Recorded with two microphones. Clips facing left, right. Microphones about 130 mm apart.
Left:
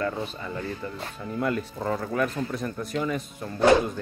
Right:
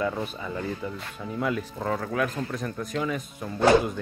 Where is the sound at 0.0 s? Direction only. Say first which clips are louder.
Right 1 dB; 5° right (ahead or behind).